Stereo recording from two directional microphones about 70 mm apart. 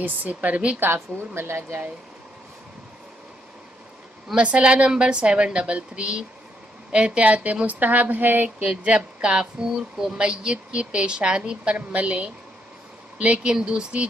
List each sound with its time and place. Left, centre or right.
0.0 s speech: right
0.7 s a woman's voice: right
4.4 s speech: centre
8.8 s speech: centre